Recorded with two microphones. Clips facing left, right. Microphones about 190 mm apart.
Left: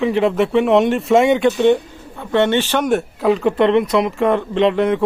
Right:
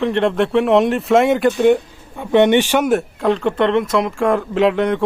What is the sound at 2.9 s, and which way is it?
Speech, centre (ahead or behind).